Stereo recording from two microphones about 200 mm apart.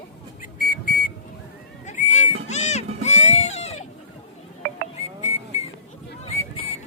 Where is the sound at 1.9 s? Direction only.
35° left (ahead or behind).